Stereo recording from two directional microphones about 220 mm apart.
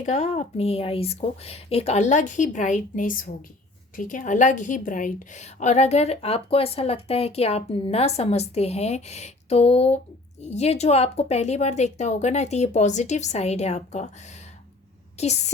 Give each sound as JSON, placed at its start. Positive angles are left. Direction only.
{"t": 0.0, "sound": "a woman's voice", "side_deg": 30}
{"t": 15.2, "sound": "a woman's voice", "side_deg": 30}